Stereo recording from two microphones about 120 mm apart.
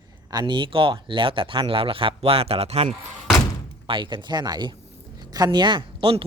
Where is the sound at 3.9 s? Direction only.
40° right (ahead or behind).